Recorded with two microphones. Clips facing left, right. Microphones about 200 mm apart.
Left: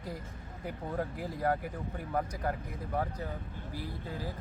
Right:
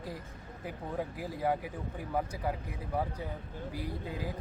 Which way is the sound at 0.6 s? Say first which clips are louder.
Left 1 dB; 5° right (ahead or behind).